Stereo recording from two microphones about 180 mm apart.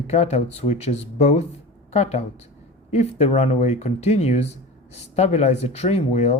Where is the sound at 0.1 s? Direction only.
40° left (ahead or behind).